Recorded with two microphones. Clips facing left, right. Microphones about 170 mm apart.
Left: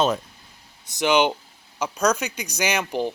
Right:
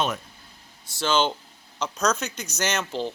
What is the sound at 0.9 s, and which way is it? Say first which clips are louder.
Speech: left 4 dB; 15° left (ahead or behind).